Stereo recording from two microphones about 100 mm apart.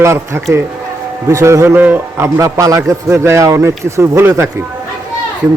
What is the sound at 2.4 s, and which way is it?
A man's voice, 35° right (ahead or behind).